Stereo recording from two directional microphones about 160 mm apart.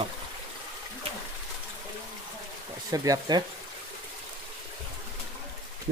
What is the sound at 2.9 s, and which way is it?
Mantra, 20° right (ahead or behind).